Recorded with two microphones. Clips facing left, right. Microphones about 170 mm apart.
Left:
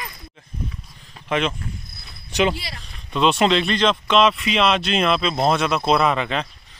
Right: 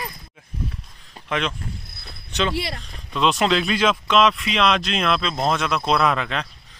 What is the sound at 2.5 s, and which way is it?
Speech, 55° right (ahead or behind).